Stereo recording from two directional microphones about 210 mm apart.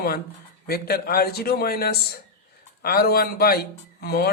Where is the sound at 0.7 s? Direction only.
45° left (ahead or behind).